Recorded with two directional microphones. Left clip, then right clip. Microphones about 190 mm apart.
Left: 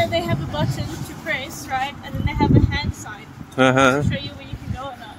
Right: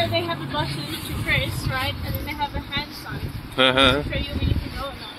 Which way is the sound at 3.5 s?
35° left (ahead or behind).